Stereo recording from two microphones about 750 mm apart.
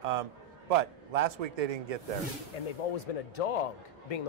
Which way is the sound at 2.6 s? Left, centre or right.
Left.